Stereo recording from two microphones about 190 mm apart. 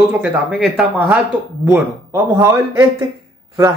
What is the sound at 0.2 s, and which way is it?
Speech, 5° right (ahead or behind).